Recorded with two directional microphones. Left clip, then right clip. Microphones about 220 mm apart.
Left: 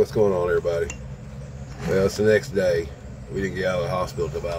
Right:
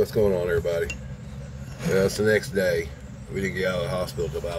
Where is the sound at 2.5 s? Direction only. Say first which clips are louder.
Left 2 dB; 5° right (ahead or behind).